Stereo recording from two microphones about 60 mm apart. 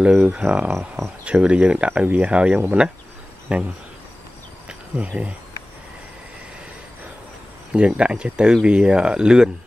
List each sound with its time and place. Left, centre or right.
0.0 s speech: right
4.6 s insect: right
7.7 s speech: centre